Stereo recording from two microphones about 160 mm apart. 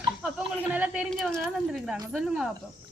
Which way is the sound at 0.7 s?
5° right (ahead or behind).